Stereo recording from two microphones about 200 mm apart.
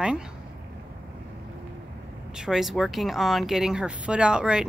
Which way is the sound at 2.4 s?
Centre (ahead or behind).